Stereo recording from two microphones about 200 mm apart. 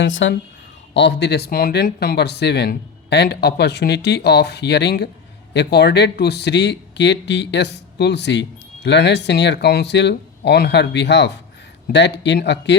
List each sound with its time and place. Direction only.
0.0 s speech: 70° left (ahead or behind)